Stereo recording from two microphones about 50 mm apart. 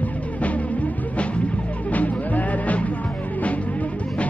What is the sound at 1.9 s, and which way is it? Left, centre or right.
Music, left.